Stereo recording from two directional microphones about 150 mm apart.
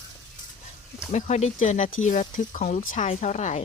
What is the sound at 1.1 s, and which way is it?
Speech, 50° left (ahead or behind).